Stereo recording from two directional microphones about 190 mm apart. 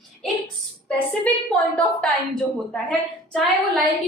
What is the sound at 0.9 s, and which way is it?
A woman's voice, 5° left (ahead or behind).